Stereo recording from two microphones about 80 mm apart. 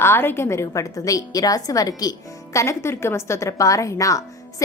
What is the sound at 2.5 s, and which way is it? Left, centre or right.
A woman's voice, left.